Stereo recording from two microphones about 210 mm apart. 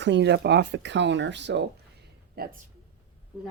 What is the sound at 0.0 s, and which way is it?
Speech, 55° right (ahead or behind).